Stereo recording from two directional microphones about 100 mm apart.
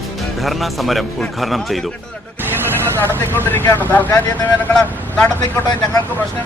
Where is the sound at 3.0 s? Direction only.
20° left (ahead or behind).